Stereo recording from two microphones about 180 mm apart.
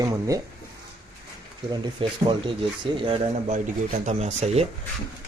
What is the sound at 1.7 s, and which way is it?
Speech, 25° right (ahead or behind).